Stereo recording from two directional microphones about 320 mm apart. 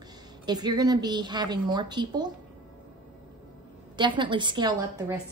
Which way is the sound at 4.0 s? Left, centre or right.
Centre.